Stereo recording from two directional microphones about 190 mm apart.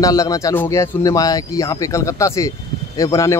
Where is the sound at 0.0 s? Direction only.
20° left (ahead or behind).